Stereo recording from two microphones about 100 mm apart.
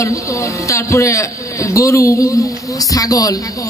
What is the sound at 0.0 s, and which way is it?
A woman's voice, 30° left (ahead or behind).